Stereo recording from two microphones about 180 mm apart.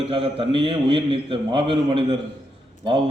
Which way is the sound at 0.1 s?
30° right (ahead or behind).